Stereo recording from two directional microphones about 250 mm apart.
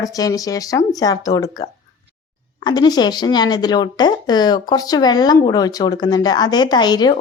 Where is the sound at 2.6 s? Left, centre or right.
Centre.